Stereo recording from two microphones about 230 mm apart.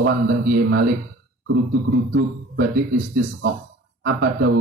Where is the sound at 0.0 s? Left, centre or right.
Right.